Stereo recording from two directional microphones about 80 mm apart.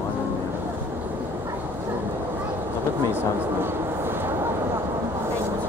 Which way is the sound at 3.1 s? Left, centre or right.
Right.